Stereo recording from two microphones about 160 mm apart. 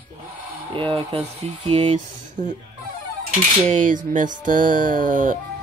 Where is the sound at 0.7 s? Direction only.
35° right (ahead or behind).